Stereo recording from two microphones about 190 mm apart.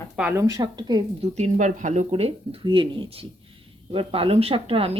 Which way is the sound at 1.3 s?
40° right (ahead or behind).